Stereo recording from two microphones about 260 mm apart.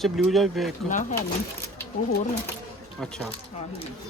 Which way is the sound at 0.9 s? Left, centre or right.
Left.